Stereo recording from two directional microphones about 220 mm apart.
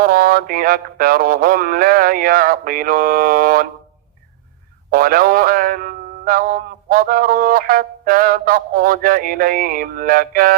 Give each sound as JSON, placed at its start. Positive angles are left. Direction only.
{"t": 0.0, "sound": "speech", "side_deg": -40}
{"t": 4.9, "sound": "speech", "side_deg": -40}